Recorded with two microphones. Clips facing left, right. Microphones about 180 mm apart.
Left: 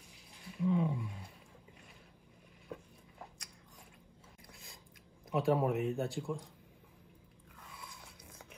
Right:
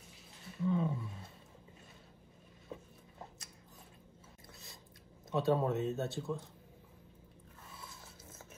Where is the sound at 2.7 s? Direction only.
25° right (ahead or behind).